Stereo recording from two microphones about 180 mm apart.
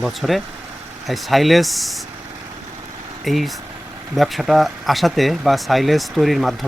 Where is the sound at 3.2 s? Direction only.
Centre (ahead or behind).